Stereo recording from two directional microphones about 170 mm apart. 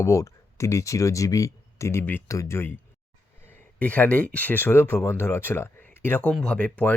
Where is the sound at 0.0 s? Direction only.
20° left (ahead or behind).